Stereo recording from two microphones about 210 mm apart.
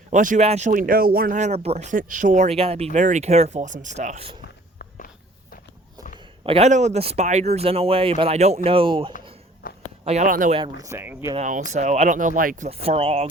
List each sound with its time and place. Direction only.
0.1 s speech: 35° right (ahead or behind)
4.8 s walk: 40° left (ahead or behind)
6.4 s speech: 30° right (ahead or behind)
10.6 s speech: 15° right (ahead or behind)
11.3 s speech: 35° right (ahead or behind)